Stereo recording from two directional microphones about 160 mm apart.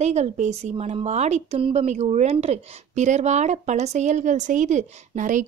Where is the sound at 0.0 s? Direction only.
45° right (ahead or behind).